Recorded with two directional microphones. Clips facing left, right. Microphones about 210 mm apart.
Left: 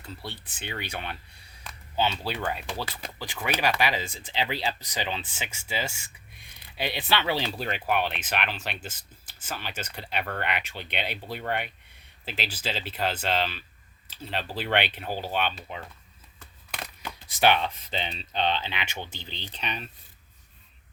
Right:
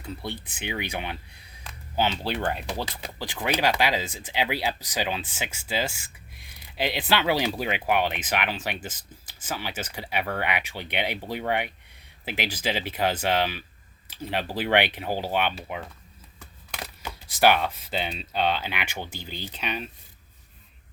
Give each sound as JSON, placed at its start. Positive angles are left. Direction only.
{"t": 0.0, "sound": "speech", "side_deg": -15}
{"t": 2.6, "sound": "speech", "side_deg": -20}
{"t": 6.8, "sound": "speech", "side_deg": -15}